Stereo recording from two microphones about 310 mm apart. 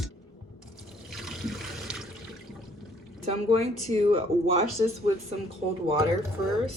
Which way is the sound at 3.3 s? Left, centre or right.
Centre.